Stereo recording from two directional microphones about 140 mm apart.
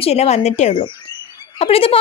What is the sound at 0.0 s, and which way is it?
Speech, 50° left (ahead or behind).